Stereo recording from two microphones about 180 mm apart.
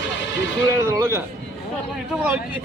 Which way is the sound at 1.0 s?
15° right (ahead or behind).